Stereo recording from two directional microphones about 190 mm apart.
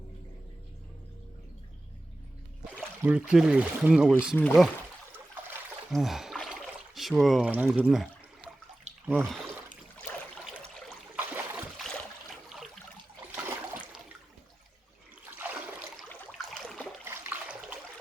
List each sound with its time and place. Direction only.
3.0 s speech: 5° right (ahead or behind)
5.1 s trickle: 10° right (ahead or behind)
5.9 s speech: centre (ahead or behind)
8.9 s a sound: 40° right (ahead or behind)
11.3 s boat: 10° right (ahead or behind)
12.5 s water: centre (ahead or behind)
13.3 s a sound: 10° right (ahead or behind)
15.4 s water: 10° right (ahead or behind)
16.0 s a sound: centre (ahead or behind)
17.1 s water: 10° right (ahead or behind)